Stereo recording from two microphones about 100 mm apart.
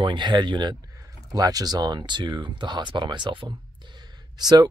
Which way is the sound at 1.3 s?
35° right (ahead or behind).